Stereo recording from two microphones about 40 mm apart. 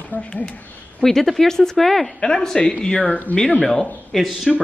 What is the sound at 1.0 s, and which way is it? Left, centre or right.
A woman's voice, centre.